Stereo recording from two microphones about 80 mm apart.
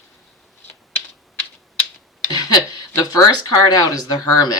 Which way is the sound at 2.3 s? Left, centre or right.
Left.